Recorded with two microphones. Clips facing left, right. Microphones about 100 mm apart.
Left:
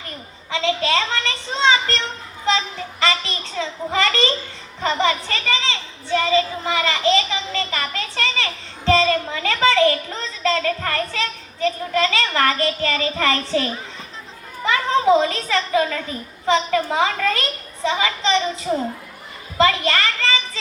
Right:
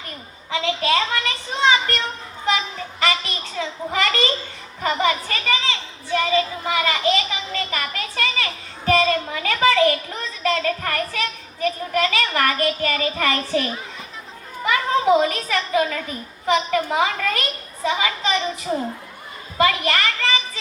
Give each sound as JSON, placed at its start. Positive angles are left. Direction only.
{"t": 0.6, "sound": "speech", "side_deg": 30}
{"t": 3.0, "sound": "a child's voice", "side_deg": 30}